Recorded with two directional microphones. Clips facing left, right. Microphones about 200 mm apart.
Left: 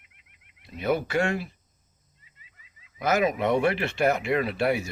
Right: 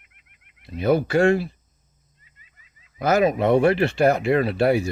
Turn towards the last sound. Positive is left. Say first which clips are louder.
# right 6 dB
turn(degrees=-35)  # may be behind; listen again after turning